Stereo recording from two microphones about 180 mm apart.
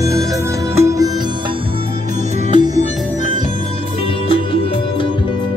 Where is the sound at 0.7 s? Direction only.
15° right (ahead or behind).